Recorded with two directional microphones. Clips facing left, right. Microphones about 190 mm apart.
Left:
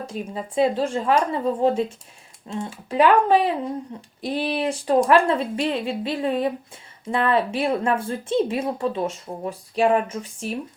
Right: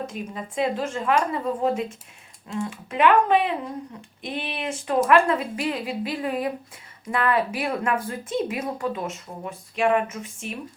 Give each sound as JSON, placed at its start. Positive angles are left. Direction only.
{"t": 0.0, "sound": "a woman's voice", "side_deg": 30}